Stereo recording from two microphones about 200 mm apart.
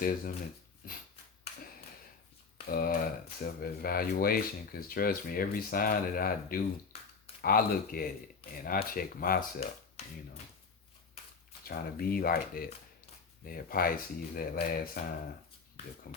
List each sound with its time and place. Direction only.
0.0 s speech: 45° left (ahead or behind)
2.7 s speech: 45° left (ahead or behind)
6.9 s a sound: 30° left (ahead or behind)
7.4 s speech: 45° left (ahead or behind)
11.6 s speech: 45° left (ahead or behind)